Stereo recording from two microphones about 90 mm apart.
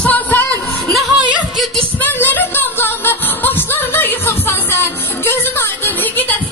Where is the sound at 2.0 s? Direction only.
20° left (ahead or behind).